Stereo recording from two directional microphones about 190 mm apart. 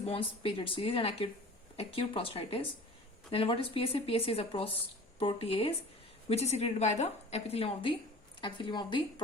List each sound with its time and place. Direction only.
0.0 s a woman's voice: 30° left (ahead or behind)